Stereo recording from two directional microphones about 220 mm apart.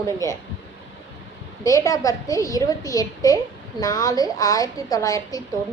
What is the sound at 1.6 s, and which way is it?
A woman's voice, 15° left (ahead or behind).